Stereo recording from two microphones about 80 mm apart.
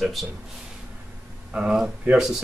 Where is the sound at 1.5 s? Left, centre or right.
Centre.